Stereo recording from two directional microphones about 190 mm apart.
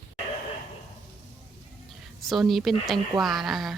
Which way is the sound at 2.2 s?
Centre (ahead or behind).